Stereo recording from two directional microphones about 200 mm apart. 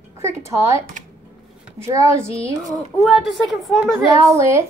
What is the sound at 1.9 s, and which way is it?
Speech, 15° right (ahead or behind).